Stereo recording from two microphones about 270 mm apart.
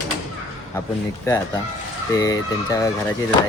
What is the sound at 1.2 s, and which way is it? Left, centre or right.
Speech, centre.